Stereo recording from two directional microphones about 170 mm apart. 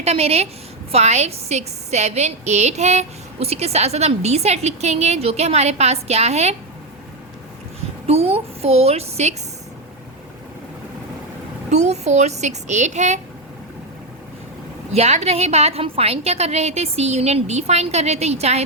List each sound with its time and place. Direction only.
0.0 s a woman's voice: 35° right (ahead or behind)
8.0 s a woman's voice: 35° right (ahead or behind)
11.7 s a woman's voice: 40° right (ahead or behind)
14.9 s a woman's voice: 40° right (ahead or behind)